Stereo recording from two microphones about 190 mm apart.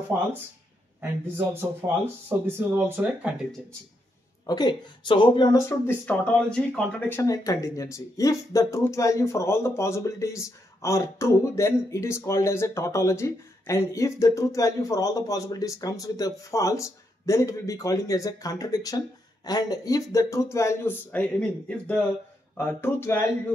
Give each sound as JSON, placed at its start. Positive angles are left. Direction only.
{"t": 1.2, "sound": "speech", "side_deg": -10}
{"t": 4.5, "sound": "speech", "side_deg": 20}
{"t": 5.7, "sound": "speech", "side_deg": 10}